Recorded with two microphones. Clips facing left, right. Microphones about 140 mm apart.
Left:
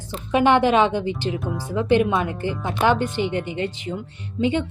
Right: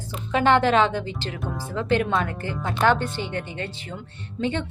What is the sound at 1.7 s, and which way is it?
Speech, 15° left (ahead or behind).